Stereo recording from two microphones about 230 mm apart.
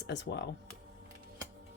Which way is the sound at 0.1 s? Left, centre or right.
Left.